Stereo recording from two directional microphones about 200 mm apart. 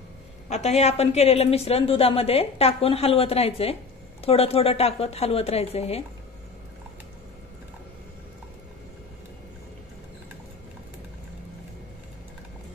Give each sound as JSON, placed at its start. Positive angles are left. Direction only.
{"t": 0.5, "sound": "a woman's voice", "side_deg": 35}